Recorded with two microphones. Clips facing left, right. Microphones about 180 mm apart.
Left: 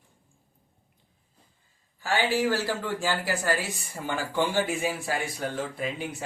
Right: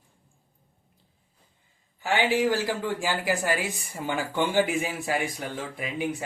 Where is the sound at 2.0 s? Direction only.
15° right (ahead or behind).